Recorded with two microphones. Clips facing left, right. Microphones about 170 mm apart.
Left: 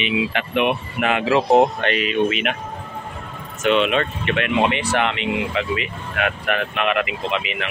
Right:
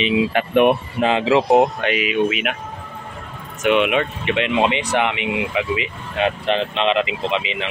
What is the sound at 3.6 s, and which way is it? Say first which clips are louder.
Speech: right 1 dB; 15° right (ahead or behind).